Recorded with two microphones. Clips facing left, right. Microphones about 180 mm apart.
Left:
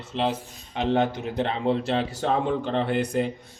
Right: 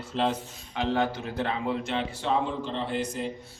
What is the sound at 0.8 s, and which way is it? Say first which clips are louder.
A man's voice: left 3 dB; 20° left (ahead or behind).